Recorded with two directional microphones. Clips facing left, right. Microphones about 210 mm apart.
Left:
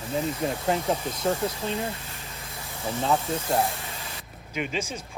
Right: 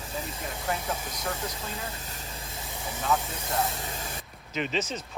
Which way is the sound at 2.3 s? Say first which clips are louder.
Even; 30° right (ahead or behind).